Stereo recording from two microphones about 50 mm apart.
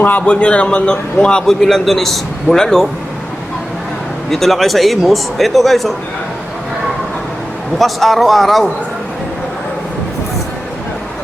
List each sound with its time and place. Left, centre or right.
0.0 s a man's voice: left
0.3 s a man's voice: left
1.5 s a man's voice: centre
4.3 s a man's voice: centre
7.8 s a man's voice: centre